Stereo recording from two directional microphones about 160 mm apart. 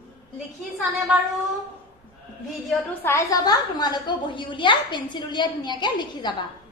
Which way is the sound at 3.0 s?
20° left (ahead or behind).